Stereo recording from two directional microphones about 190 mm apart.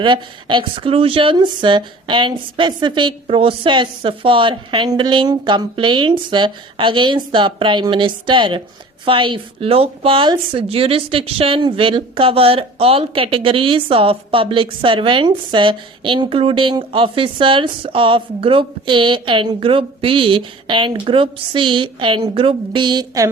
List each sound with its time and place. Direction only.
0.0 s a woman's voice: 25° right (ahead or behind)